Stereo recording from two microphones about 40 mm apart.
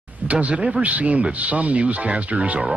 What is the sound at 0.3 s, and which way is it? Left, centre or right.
Speech, right.